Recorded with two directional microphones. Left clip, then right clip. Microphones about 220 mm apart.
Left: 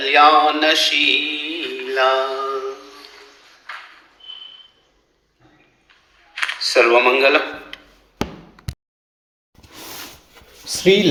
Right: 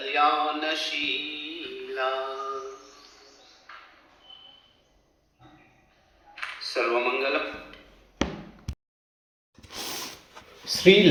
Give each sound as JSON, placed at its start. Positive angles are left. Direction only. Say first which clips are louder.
{"t": 0.0, "sound": "music", "louder": "left 11 dB", "side_deg": 45}
{"t": 2.7, "sound": "a sound", "louder": "left 9 dB", "side_deg": 0}
{"t": 6.3, "sound": "computer keyboard", "louder": "left 13 dB", "side_deg": 45}
{"t": 6.7, "sound": "speech", "louder": "left 12 dB", "side_deg": 45}
{"t": 10.7, "sound": "speech", "louder": "left 2 dB", "side_deg": 35}